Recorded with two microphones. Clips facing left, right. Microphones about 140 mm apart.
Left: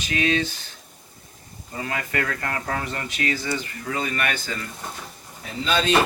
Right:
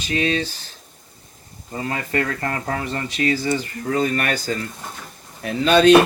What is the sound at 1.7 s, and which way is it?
Speech, 30° right (ahead or behind).